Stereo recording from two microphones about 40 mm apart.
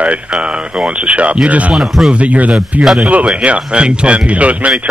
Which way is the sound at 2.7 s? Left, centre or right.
Centre.